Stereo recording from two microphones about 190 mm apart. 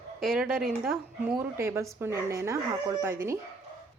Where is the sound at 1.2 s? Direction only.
15° right (ahead or behind).